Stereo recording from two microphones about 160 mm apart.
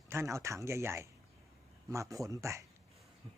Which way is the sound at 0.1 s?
15° right (ahead or behind).